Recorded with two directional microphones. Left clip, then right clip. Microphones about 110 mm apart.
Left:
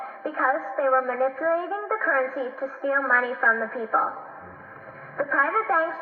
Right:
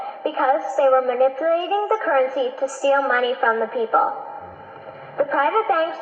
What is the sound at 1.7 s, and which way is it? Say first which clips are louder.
Speech: right 7 dB; 40° right (ahead or behind).